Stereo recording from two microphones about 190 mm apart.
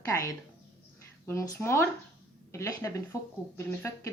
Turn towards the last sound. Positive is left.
turn(degrees=15)  # may be behind; listen again after turning